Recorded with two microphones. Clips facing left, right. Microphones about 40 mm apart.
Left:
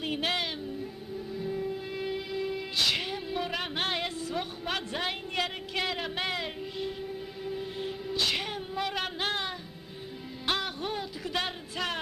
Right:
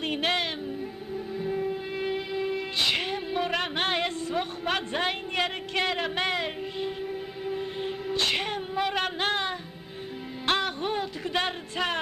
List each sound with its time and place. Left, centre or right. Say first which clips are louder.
0.0 s music: right 3 dB; centre
10.6 s music: right 5 dB; centre